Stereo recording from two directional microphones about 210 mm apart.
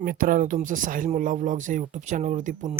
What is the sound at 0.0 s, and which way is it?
Speech, 40° right (ahead or behind).